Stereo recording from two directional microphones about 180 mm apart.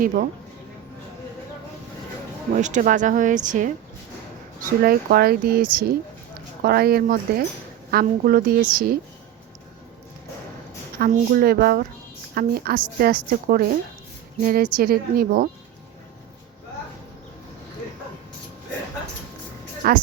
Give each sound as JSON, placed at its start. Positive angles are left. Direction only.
{"t": 0.0, "sound": "speech", "side_deg": -50}
{"t": 2.6, "sound": "speech", "side_deg": -40}
{"t": 4.8, "sound": "a woman's voice", "side_deg": -55}
{"t": 10.9, "sound": "a woman's voice", "side_deg": -55}
{"t": 19.8, "sound": "speech", "side_deg": -55}